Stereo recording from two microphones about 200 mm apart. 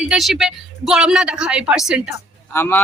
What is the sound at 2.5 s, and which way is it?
Speech, 10° left (ahead or behind).